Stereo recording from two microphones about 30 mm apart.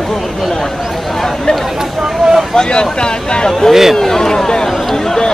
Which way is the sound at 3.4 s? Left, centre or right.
Centre.